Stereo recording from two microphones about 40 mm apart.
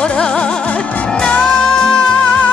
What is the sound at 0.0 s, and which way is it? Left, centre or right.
Music, left.